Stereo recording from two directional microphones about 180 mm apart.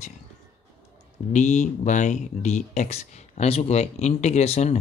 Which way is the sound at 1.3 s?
40° left (ahead or behind).